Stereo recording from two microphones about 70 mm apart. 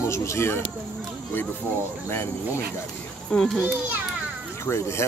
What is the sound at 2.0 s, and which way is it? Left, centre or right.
Speech, left.